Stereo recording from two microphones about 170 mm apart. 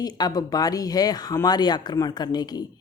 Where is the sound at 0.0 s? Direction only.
25° left (ahead or behind).